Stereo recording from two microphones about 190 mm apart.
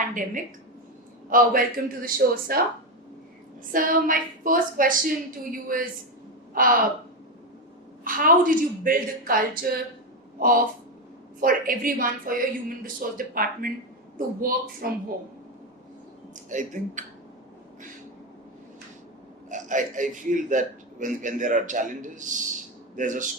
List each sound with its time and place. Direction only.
0.1 s a woman's voice: 45° right (ahead or behind)
3.7 s a woman's voice: 45° right (ahead or behind)
8.0 s a woman's voice: 45° right (ahead or behind)
14.8 s a woman's voice: 50° right (ahead or behind)
16.5 s a man's voice: 40° right (ahead or behind)
19.5 s a man's voice: 40° right (ahead or behind)